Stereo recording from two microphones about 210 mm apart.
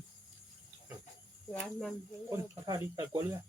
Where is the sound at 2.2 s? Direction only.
15° right (ahead or behind).